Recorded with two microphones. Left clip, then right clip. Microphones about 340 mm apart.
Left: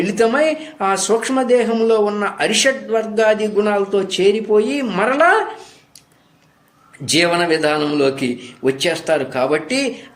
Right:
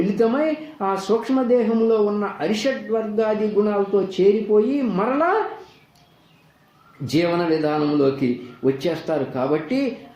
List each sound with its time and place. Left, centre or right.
0.2 s speech: left
7.0 s speech: left